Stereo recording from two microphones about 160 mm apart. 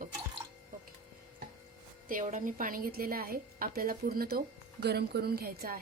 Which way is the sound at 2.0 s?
55° right (ahead or behind).